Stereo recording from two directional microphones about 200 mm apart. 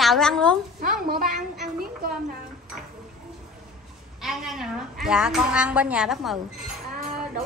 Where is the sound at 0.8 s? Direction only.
45° right (ahead or behind).